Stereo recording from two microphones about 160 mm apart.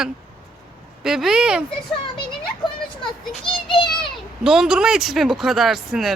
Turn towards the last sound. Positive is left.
turn(degrees=0)  # may be behind; listen again after turning